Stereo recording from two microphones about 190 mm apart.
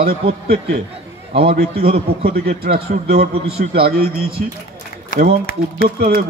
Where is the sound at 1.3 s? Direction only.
30° right (ahead or behind).